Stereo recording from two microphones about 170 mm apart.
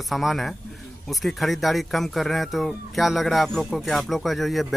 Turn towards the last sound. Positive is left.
turn(degrees=0)  # may be behind; listen again after turning